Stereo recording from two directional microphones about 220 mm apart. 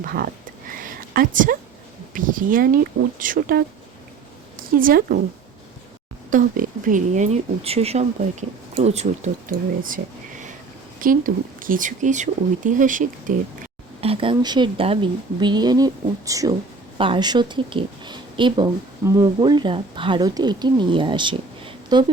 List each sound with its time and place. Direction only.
0.0 s speech: 40° right (ahead or behind)
0.8 s a sound: 40° right (ahead or behind)
2.1 s speech: 40° right (ahead or behind)
4.8 s speech: 40° right (ahead or behind)
6.3 s speech: 35° right (ahead or behind)
11.0 s speech: 40° right (ahead or behind)
14.0 s speech: 25° right (ahead or behind)